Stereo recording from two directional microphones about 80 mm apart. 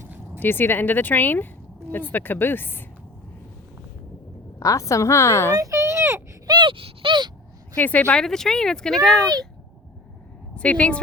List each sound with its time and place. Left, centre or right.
0.3 s speech: left
4.6 s a woman's voice: left
5.5 s a sound: right
6.5 s a sound: right
7.8 s speech: left
8.2 s speech: centre
10.5 s speech: centre